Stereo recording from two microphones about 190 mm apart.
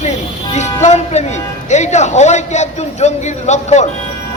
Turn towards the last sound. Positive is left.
turn(degrees=35)  # may be behind; listen again after turning